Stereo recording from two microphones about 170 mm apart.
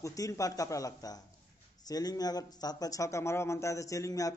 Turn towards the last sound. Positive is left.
turn(degrees=20)  # may be behind; listen again after turning